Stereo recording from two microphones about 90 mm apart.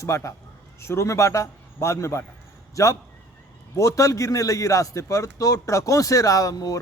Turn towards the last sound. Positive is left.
turn(degrees=45)  # may be behind; listen again after turning